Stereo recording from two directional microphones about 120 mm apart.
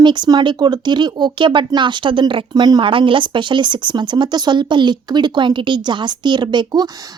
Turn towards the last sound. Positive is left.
turn(degrees=-40)  # may be behind; listen again after turning